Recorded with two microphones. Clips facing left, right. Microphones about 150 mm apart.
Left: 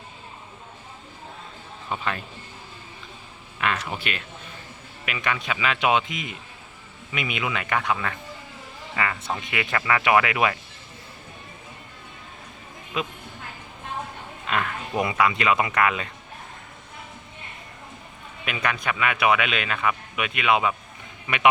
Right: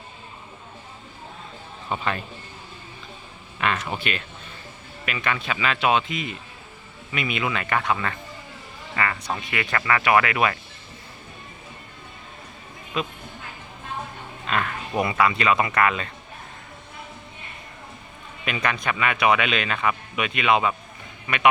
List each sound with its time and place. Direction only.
1.9 s speech: centre (ahead or behind)
3.6 s speech: 5° left (ahead or behind)
14.4 s speech: 15° left (ahead or behind)
18.4 s speech: 5° left (ahead or behind)